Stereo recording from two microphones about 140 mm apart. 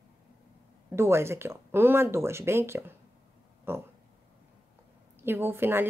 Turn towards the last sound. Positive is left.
turn(degrees=-15)  # may be behind; listen again after turning